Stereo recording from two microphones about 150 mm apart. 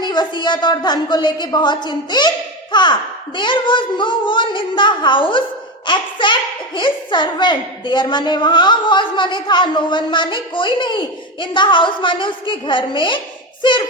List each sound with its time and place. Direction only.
0.0 s a woman's voice: 30° left (ahead or behind)